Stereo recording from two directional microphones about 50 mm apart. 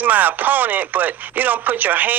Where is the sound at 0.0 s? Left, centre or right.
Right.